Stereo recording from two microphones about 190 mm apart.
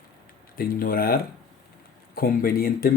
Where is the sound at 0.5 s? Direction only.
50° left (ahead or behind).